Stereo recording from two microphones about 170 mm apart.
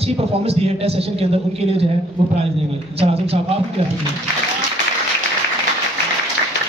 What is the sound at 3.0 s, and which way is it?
Speech, 35° right (ahead or behind).